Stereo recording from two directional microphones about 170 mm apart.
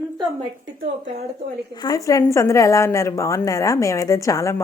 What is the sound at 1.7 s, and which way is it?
A woman's voice, 25° left (ahead or behind).